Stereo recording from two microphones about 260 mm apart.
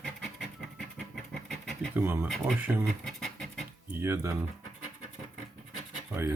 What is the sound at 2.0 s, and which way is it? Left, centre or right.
Speech, centre.